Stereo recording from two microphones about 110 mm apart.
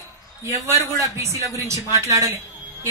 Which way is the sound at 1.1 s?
25° right (ahead or behind).